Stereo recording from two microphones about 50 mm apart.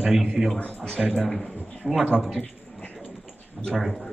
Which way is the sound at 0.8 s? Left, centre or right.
Centre.